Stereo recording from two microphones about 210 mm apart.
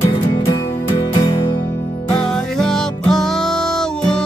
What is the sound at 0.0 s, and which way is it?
Music, 20° left (ahead or behind).